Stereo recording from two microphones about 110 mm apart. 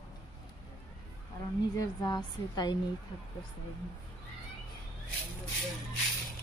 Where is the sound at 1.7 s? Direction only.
40° left (ahead or behind).